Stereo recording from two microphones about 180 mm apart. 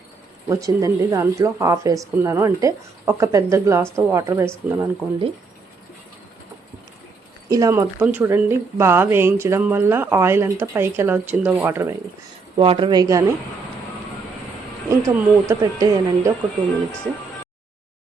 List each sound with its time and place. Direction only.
0.4 s speech: 15° right (ahead or behind)
7.5 s speech: 15° right (ahead or behind)
12.5 s speech: 30° right (ahead or behind)
14.8 s speech: 15° right (ahead or behind)